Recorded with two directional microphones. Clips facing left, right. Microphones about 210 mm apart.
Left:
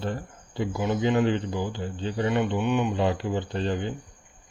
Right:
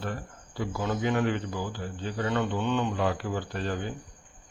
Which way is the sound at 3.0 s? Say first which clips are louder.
Left 3 dB; 25° left (ahead or behind).